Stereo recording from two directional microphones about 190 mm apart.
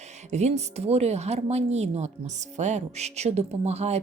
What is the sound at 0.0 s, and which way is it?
A woman's voice, 35° right (ahead or behind).